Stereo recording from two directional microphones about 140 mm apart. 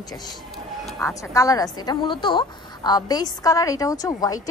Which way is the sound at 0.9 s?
20° left (ahead or behind).